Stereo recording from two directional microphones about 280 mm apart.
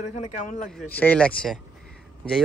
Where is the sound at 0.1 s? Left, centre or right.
Left.